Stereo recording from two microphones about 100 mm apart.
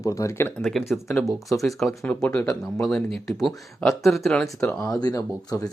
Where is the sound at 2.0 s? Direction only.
15° left (ahead or behind).